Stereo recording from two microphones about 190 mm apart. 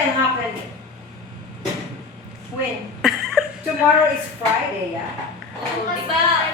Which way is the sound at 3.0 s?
Centre (ahead or behind).